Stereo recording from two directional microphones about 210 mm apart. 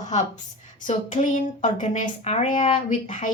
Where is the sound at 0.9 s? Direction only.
35° left (ahead or behind).